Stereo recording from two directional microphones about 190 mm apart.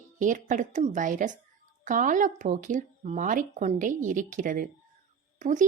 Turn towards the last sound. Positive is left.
turn(degrees=-40)  # may be behind; listen again after turning